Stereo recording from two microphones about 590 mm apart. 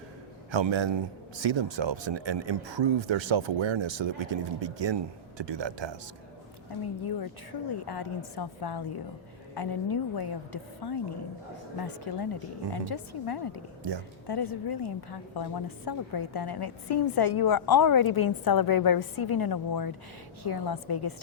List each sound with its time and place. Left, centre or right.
0.5 s speech: right
7.0 s a woman's voice: left
12.1 s a woman's voice: left